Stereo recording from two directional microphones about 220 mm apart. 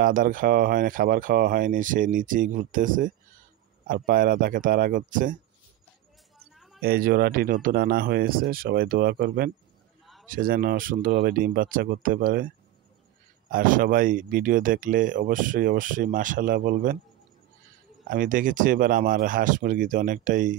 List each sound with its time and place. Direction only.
0.0 s speech: 40° right (ahead or behind)
6.5 s a sound: centre (ahead or behind)
6.8 s speech: 45° right (ahead or behind)
18.0 s speech: 40° right (ahead or behind)